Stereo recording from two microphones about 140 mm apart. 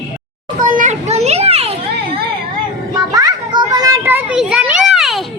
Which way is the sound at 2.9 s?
25° right (ahead or behind).